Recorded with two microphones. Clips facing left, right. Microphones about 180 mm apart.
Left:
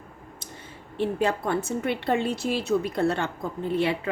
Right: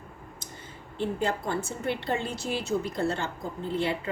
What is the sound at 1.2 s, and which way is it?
A woman's voice, 65° left (ahead or behind).